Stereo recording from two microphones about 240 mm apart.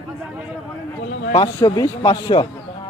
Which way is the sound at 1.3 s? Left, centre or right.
Centre.